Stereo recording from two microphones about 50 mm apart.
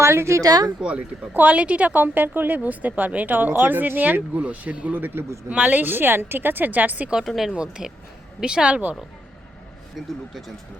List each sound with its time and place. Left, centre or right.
0.0 s speech: right
0.8 s speech: right
1.3 s a woman's voice: right
1.5 s a woman's voice: right
7.3 s speech: centre
7.5 s a woman's voice: centre